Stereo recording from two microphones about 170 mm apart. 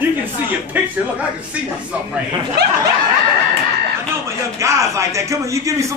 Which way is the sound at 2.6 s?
75° right (ahead or behind).